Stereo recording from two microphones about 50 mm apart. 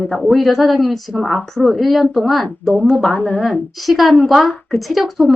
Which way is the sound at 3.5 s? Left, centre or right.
Centre.